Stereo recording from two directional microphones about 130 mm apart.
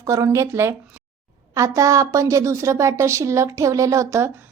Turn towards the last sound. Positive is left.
turn(degrees=-25)  # may be behind; listen again after turning